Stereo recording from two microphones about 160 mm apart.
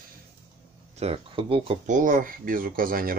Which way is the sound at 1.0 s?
35° right (ahead or behind).